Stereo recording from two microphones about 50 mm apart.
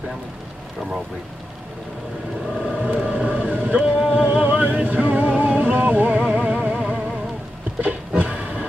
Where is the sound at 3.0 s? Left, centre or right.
Right.